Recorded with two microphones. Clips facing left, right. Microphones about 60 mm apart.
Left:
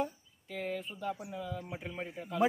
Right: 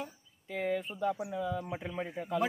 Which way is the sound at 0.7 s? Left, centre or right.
Right.